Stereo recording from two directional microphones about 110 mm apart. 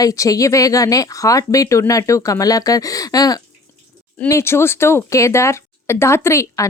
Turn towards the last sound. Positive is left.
turn(degrees=25)  # may be behind; listen again after turning